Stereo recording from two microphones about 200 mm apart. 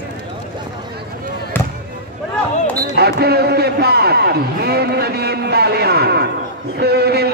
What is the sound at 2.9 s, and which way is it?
A man's voice, 55° right (ahead or behind).